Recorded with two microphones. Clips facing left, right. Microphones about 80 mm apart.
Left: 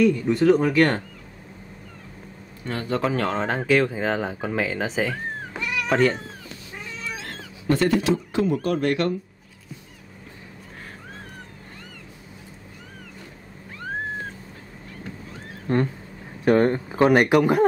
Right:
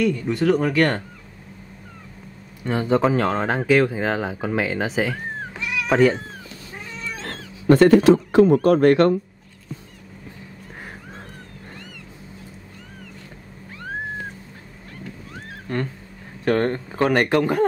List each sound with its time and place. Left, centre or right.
0.0 s speech: centre
2.6 s speech: centre
5.6 s cat: centre
7.6 s speech: right
15.7 s a sound: left
16.4 s speech: centre